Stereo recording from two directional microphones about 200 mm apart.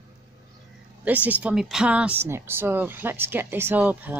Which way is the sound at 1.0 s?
5° right (ahead or behind).